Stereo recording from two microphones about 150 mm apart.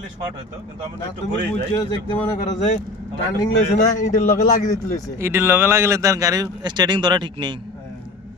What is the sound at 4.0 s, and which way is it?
Speech, 60° left (ahead or behind).